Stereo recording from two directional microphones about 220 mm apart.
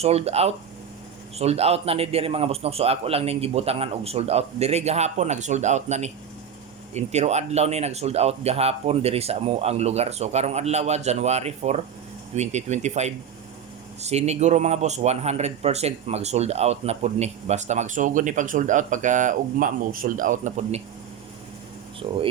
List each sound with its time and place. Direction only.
0.0 s speech: 30° right (ahead or behind)
22.0 s speech: 25° right (ahead or behind)